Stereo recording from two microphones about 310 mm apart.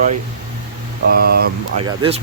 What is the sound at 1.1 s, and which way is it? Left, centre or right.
Speech, right.